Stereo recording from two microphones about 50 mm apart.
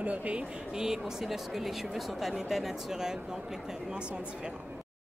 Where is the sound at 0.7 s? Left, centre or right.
Centre.